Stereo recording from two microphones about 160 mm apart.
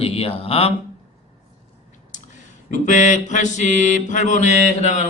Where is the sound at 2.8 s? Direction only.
50° left (ahead or behind).